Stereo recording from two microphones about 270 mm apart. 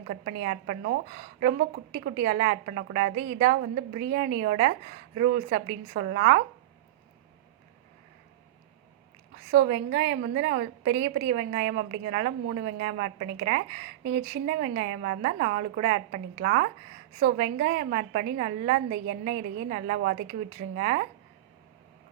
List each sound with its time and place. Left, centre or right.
0.1 s a woman's voice: right
9.5 s a woman's voice: right